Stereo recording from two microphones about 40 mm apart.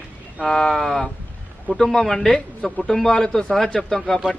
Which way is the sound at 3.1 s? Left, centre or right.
Centre.